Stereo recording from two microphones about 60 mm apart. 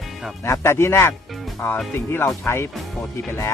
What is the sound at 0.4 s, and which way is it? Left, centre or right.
Speech, left.